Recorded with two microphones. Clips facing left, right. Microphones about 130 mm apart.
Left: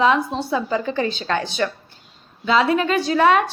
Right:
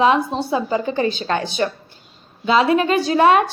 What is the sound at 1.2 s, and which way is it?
Speech, 25° right (ahead or behind).